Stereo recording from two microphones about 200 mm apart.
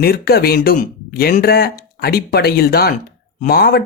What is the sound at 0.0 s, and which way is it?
Speech, 50° left (ahead or behind).